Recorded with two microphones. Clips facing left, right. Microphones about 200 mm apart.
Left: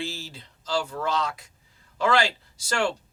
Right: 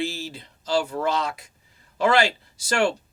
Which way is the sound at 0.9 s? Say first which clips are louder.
Right 3 dB; 25° right (ahead or behind).